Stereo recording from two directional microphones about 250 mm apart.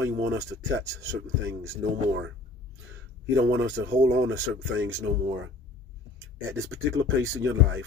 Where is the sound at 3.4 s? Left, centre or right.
Right.